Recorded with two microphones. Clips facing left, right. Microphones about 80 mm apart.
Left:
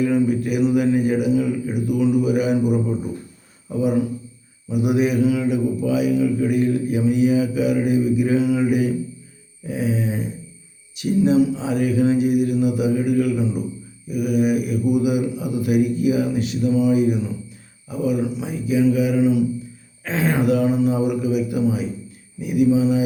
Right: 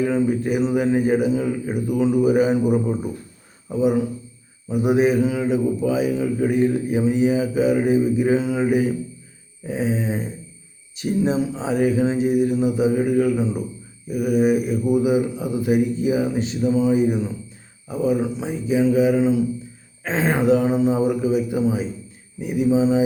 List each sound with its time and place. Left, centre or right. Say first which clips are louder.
0.0 s a man's voice: left 1 dB; right